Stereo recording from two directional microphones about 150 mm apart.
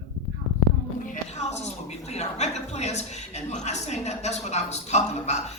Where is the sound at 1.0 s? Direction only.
55° left (ahead or behind).